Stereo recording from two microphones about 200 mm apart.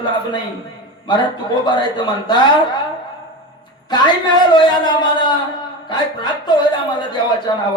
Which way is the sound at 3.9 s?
20° left (ahead or behind).